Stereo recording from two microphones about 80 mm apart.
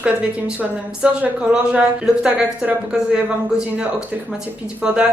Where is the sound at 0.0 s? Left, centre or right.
Centre.